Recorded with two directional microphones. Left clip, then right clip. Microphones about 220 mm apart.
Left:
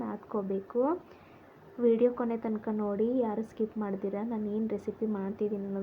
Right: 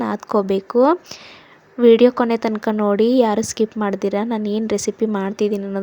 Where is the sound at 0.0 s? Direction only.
50° right (ahead or behind).